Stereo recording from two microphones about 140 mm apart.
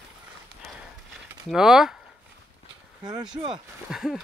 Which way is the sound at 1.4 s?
Centre (ahead or behind).